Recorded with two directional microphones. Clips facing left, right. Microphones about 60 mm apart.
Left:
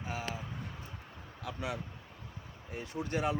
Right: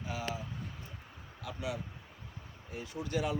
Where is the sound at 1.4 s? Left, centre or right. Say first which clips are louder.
Even; left.